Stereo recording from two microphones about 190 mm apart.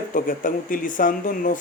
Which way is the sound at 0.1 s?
45° left (ahead or behind).